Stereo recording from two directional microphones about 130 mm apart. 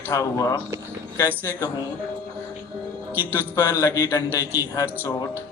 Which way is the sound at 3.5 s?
25° left (ahead or behind).